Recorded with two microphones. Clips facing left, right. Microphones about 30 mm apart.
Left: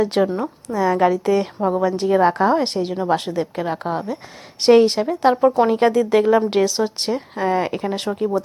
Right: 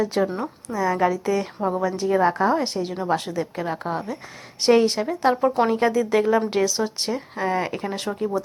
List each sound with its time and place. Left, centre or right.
0.0 s speech: left
0.4 s a woman's voice: left